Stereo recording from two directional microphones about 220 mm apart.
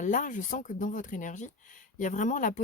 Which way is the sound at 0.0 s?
35° left (ahead or behind).